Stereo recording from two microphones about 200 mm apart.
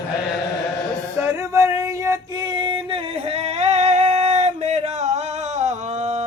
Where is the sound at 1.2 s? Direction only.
15° right (ahead or behind).